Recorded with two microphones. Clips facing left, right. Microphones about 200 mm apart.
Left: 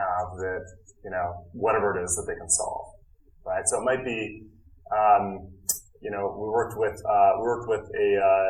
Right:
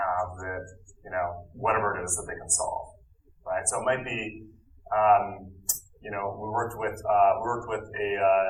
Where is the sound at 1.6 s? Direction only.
40° left (ahead or behind).